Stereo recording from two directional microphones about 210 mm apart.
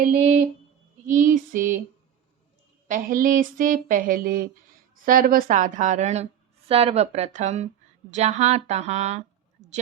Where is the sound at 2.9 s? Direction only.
40° right (ahead or behind).